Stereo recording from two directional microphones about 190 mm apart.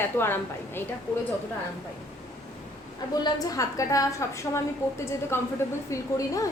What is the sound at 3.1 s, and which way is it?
A woman's voice, 20° left (ahead or behind).